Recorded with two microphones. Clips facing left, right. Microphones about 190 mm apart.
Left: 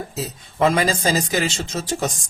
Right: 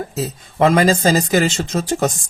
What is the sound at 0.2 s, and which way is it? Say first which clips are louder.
Speech: right 3 dB; 50° right (ahead or behind).